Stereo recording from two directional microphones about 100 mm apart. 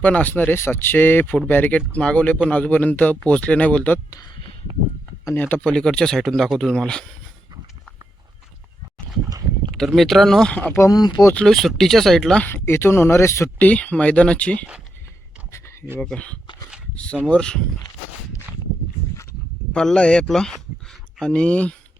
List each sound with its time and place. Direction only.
0.0 s speech: 15° left (ahead or behind)
5.3 s speech: 20° left (ahead or behind)
9.7 s speech: centre (ahead or behind)
10.6 s speech: 25° left (ahead or behind)
10.9 s speech: 45° left (ahead or behind)
11.3 s speech: 5° left (ahead or behind)
12.5 s speech: 25° left (ahead or behind)
13.6 s speech: 15° left (ahead or behind)
15.5 s a sound: 30° left (ahead or behind)
16.0 s speech: 10° left (ahead or behind)
19.7 s speech: 10° left (ahead or behind)